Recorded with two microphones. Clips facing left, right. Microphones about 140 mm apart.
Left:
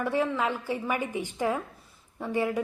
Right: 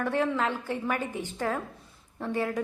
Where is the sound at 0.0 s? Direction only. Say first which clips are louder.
Even; 5° left (ahead or behind).